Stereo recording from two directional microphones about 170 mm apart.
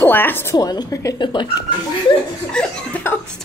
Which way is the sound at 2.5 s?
5° left (ahead or behind).